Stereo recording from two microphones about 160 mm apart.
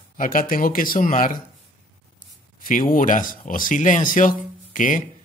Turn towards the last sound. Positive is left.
turn(degrees=55)  # may be behind; listen again after turning